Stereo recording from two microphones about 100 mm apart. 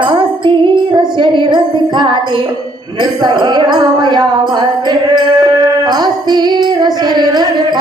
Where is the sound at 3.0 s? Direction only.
45° right (ahead or behind).